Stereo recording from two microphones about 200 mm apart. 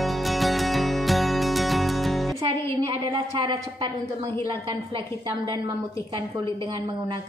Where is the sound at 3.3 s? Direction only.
25° right (ahead or behind).